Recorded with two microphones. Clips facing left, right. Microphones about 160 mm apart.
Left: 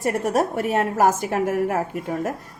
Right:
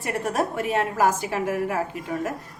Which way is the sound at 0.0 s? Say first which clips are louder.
Left 4 dB; 40° left (ahead or behind).